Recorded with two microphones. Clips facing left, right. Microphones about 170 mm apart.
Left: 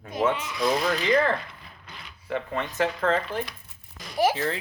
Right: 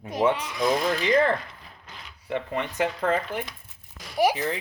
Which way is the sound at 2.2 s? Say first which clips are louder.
Right 1 dB; 20° right (ahead or behind).